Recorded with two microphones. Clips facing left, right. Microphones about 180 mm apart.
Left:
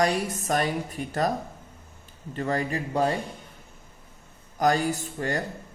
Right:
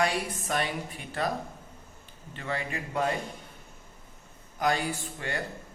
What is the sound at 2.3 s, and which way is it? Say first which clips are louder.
Speech: left 7 dB; 40° left (ahead or behind).